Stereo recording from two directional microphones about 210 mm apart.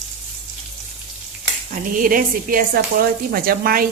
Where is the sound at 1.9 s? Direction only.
40° right (ahead or behind).